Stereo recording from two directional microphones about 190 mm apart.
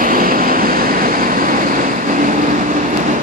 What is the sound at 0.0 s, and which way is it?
Vehicle, 45° right (ahead or behind).